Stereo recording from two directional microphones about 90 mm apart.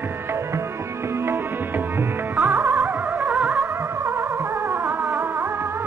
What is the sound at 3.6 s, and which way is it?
Music, 30° right (ahead or behind).